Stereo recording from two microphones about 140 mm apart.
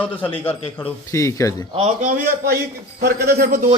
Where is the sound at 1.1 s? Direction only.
20° left (ahead or behind).